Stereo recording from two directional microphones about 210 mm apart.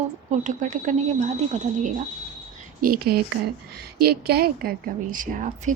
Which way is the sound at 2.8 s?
45° right (ahead or behind).